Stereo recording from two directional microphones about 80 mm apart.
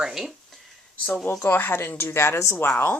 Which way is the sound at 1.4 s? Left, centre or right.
Left.